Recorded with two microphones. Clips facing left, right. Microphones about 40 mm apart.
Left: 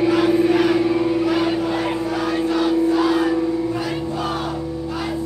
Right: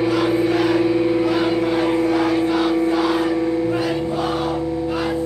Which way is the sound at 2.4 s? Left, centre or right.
Right.